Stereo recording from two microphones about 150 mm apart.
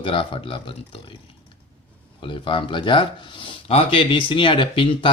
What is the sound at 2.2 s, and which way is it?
Speech, 35° left (ahead or behind).